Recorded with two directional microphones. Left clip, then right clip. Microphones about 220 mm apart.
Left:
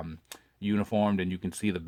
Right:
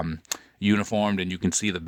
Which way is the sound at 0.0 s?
30° right (ahead or behind).